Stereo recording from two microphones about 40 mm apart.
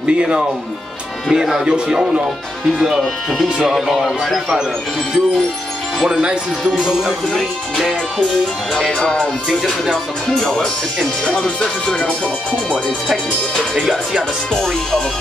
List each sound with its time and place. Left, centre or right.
0.0 s speech: right
1.3 s speech: centre
3.6 s speech: centre
6.8 s speech: centre
7.3 s speech: centre
9.6 s speech: centre
10.3 s speech: centre
11.2 s music: centre
12.8 s speech: centre
13.7 s speech: centre
14.5 s speech: centre